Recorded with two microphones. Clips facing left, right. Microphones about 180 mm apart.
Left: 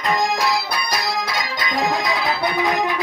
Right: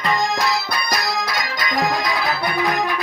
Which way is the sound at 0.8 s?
25° left (ahead or behind).